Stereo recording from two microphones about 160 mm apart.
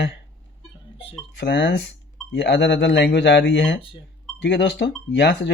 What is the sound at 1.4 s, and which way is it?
Speech, 90° left.